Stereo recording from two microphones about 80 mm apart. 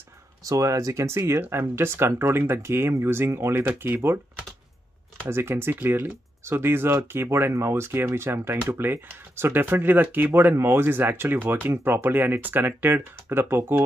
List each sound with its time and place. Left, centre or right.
0.4 s speech: right
5.3 s speech: right